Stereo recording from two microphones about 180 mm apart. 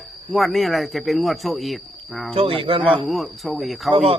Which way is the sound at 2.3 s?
30° right (ahead or behind).